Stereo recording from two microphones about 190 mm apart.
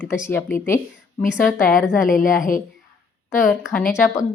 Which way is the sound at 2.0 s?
45° left (ahead or behind).